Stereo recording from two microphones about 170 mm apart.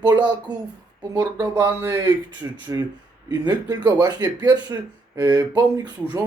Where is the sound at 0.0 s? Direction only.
25° right (ahead or behind).